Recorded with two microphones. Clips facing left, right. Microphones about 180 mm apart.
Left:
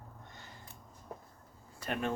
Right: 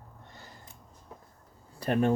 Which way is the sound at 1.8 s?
35° right (ahead or behind).